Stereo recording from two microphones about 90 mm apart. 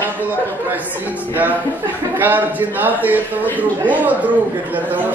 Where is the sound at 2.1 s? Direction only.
20° right (ahead or behind).